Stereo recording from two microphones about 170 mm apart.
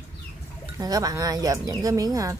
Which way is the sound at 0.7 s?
20° right (ahead or behind).